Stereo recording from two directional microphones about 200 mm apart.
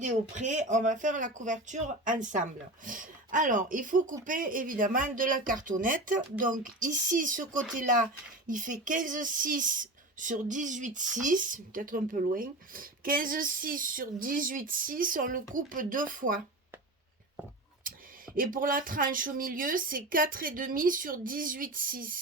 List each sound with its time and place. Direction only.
0.0 s speech: 35° right (ahead or behind)
18.3 s speech: 45° right (ahead or behind)